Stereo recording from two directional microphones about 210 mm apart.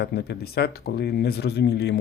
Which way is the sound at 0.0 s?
50° left (ahead or behind).